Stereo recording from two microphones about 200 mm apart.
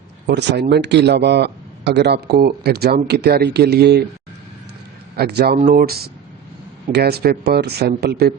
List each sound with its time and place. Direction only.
0.3 s a man's voice: 55° right (ahead or behind)
5.1 s speech: 55° right (ahead or behind)